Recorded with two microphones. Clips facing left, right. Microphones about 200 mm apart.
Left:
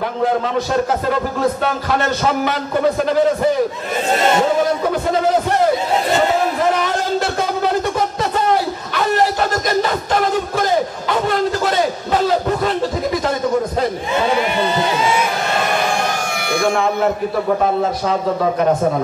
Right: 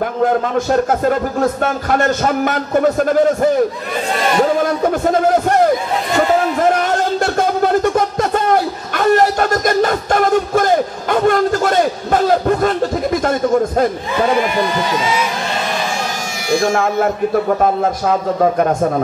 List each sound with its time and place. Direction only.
0.2 s a man's voice: 50° right (ahead or behind)
8.9 s music: 50° right (ahead or behind)
16.4 s speech: 60° left (ahead or behind)